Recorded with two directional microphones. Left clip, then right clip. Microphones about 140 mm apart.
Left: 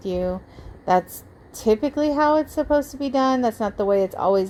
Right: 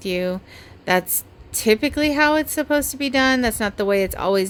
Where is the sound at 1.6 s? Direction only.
15° right (ahead or behind).